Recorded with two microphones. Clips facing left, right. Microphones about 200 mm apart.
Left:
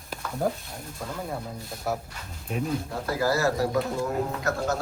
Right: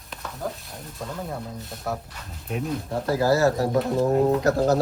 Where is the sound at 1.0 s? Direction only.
Centre (ahead or behind).